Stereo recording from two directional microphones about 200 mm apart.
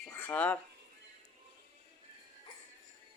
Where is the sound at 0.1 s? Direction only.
10° left (ahead or behind).